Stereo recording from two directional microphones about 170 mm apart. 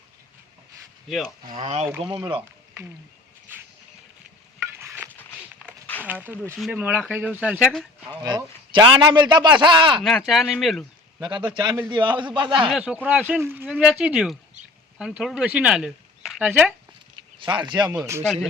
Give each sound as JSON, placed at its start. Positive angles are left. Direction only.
{"t": 1.6, "sound": "speech", "side_deg": -40}
{"t": 2.0, "sound": "a man's voice", "side_deg": -30}
{"t": 6.1, "sound": "speech", "side_deg": -10}
{"t": 8.2, "sound": "a man's voice", "side_deg": -25}
{"t": 10.0, "sound": "speech", "side_deg": 0}
{"t": 11.2, "sound": "a man's voice", "side_deg": -25}
{"t": 12.6, "sound": "speech", "side_deg": -5}
{"t": 17.4, "sound": "a man's voice", "side_deg": -25}